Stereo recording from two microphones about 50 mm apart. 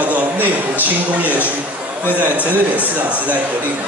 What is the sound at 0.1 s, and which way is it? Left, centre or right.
A man's voice, right.